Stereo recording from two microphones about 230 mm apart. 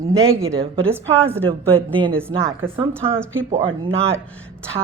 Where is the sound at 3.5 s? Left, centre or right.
Right.